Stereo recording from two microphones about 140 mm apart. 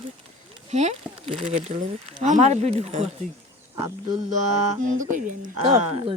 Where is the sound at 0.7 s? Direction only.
55° right (ahead or behind).